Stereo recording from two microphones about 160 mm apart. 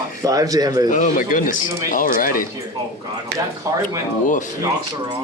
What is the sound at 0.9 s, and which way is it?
Speech, 55° left (ahead or behind).